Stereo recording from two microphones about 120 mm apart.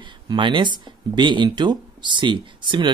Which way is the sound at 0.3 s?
40° right (ahead or behind).